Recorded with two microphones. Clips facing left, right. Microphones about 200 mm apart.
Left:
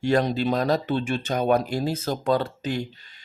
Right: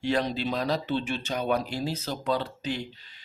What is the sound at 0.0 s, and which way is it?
Speech, 45° left (ahead or behind).